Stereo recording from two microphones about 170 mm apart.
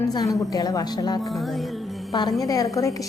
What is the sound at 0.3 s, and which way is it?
Speech, 20° left (ahead or behind).